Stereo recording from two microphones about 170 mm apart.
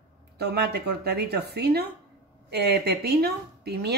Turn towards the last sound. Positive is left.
turn(degrees=-70)  # may be behind; listen again after turning